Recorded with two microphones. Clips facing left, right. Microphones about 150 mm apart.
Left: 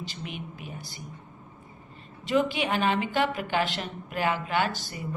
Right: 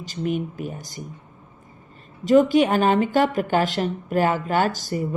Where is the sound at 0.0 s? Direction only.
45° right (ahead or behind).